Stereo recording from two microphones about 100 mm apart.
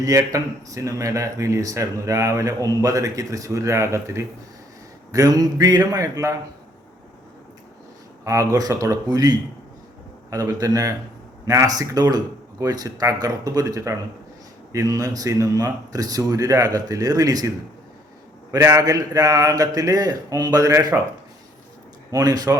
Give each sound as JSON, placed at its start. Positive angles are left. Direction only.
{"t": 0.0, "sound": "speech", "side_deg": -35}
{"t": 8.2, "sound": "speech", "side_deg": -30}
{"t": 18.5, "sound": "speech", "side_deg": -30}
{"t": 22.1, "sound": "speech", "side_deg": -40}